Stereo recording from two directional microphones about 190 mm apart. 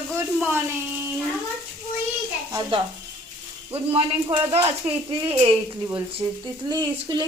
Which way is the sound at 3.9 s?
30° right (ahead or behind).